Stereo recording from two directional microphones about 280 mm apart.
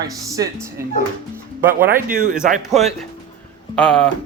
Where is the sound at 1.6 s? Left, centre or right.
Centre.